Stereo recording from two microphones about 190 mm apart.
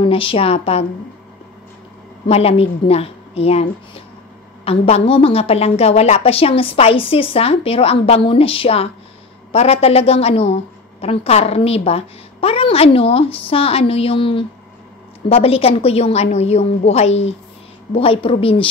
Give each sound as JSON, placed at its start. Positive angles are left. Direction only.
{"t": 0.0, "sound": "a woman's voice", "side_deg": 30}
{"t": 2.2, "sound": "a woman's voice", "side_deg": 30}